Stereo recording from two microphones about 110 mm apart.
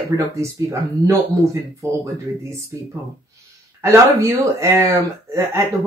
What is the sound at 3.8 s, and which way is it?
Speech, 25° right (ahead or behind).